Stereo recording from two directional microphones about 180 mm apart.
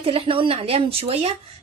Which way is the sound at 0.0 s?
30° right (ahead or behind).